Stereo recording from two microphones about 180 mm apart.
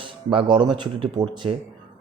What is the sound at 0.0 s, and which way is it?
Speech, 30° right (ahead or behind).